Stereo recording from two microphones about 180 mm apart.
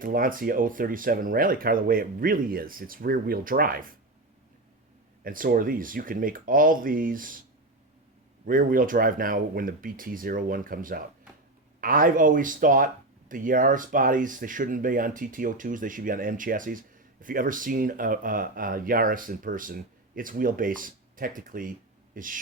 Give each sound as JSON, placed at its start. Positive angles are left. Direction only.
{"t": 0.0, "sound": "speech", "side_deg": -50}
{"t": 5.2, "sound": "speech", "side_deg": -50}
{"t": 8.4, "sound": "speech", "side_deg": -50}